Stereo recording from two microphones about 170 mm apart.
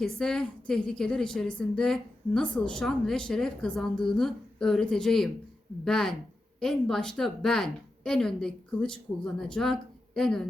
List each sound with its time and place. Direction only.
0.0 s a woman's voice: 5° left (ahead or behind)